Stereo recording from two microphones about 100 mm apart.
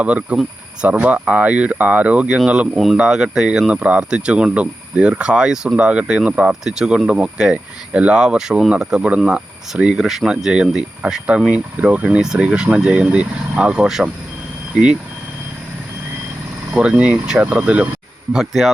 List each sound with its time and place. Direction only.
0.0 s speech: 10° right (ahead or behind)
16.7 s speech: 10° right (ahead or behind)
18.3 s speech: centre (ahead or behind)